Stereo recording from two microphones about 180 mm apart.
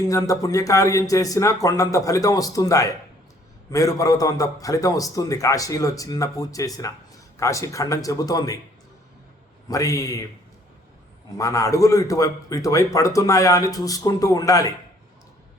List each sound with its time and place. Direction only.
0.0 s a man's voice: 20° left (ahead or behind)
9.6 s a man's voice: 20° left (ahead or behind)
11.3 s a man's voice: 15° left (ahead or behind)